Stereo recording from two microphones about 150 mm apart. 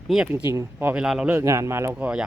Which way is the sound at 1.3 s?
20° right (ahead or behind).